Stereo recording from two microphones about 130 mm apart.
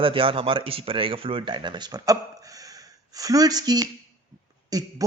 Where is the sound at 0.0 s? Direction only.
45° right (ahead or behind).